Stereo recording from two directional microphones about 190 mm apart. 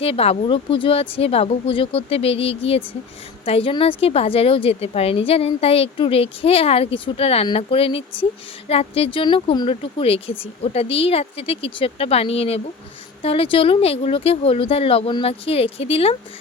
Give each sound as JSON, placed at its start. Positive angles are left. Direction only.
{"t": 0.0, "sound": "a woman's voice", "side_deg": 30}